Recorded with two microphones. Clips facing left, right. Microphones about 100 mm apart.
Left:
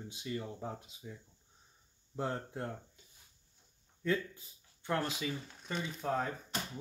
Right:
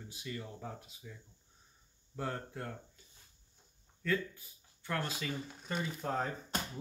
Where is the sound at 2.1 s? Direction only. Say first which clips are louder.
Left 2 dB; 25° left (ahead or behind).